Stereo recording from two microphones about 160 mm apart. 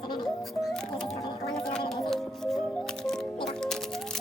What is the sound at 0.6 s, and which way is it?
Music, 5° left (ahead or behind).